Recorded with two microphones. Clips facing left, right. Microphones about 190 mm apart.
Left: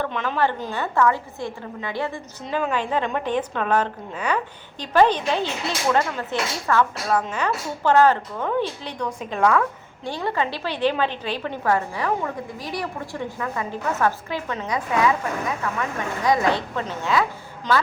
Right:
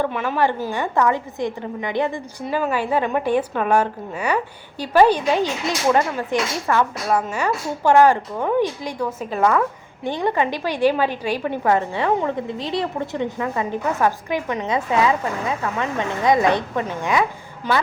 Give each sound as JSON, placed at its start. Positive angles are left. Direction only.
{"t": 0.0, "sound": "speech", "side_deg": -10}
{"t": 2.4, "sound": "speech", "side_deg": -5}
{"t": 10.0, "sound": "speech", "side_deg": -20}